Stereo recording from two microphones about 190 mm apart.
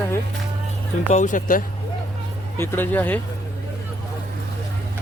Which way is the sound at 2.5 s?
10° left (ahead or behind).